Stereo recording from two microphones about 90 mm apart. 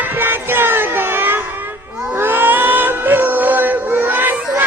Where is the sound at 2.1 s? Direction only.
25° right (ahead or behind).